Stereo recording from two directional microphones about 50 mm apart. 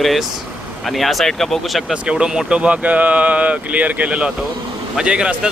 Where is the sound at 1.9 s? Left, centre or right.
Centre.